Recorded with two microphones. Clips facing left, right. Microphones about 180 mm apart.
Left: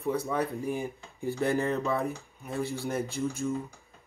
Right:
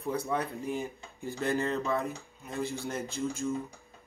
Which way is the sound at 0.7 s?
15° left (ahead or behind).